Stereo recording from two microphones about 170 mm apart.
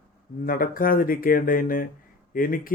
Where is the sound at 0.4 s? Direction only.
55° left (ahead or behind).